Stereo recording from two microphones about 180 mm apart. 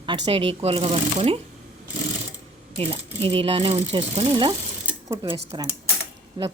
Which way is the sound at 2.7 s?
35° right (ahead or behind).